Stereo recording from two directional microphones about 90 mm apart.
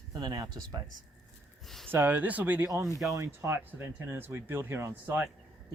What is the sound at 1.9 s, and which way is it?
Speech, 20° right (ahead or behind).